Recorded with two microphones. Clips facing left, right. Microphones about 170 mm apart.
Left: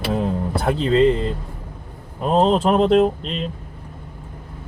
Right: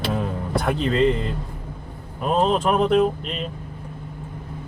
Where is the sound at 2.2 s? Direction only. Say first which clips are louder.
Left 3 dB; 30° left (ahead or behind).